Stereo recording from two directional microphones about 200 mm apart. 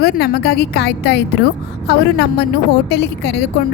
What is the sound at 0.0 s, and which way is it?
A woman's voice, 50° left (ahead or behind).